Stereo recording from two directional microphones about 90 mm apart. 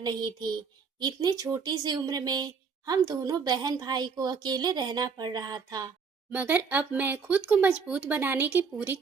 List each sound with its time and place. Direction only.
0.0 s speech: 50° right (ahead or behind)
6.3 s speech: 20° right (ahead or behind)